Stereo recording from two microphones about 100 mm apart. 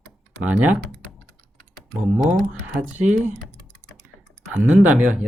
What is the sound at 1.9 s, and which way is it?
Speech, 20° right (ahead or behind).